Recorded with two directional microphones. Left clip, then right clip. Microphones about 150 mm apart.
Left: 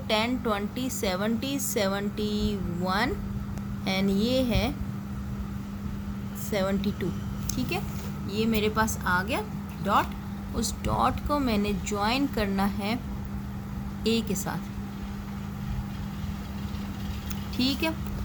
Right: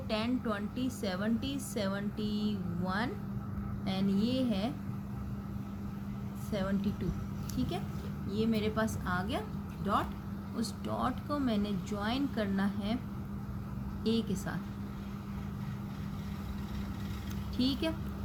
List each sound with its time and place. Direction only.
0.1 s a woman's voice: 35° left (ahead or behind)
6.5 s a woman's voice: 30° left (ahead or behind)
8.3 s a woman's voice: 30° left (ahead or behind)
14.0 s a woman's voice: 35° left (ahead or behind)
17.6 s a woman's voice: 30° left (ahead or behind)